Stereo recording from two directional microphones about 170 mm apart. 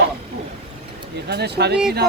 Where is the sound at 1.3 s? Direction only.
75° right (ahead or behind).